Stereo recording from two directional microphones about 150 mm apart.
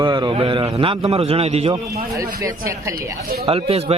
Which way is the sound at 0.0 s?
30° right (ahead or behind).